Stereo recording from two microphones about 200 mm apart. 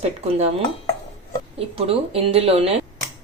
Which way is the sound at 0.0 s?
30° right (ahead or behind).